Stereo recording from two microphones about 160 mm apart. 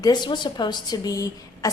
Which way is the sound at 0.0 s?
30° left (ahead or behind).